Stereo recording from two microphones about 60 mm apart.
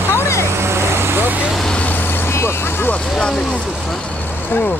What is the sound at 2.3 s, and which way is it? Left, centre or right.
Vehicle, left.